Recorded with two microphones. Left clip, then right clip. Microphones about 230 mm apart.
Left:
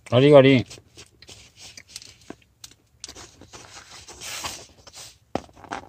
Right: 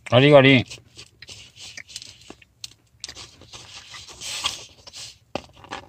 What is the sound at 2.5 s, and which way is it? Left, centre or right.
Rub, left.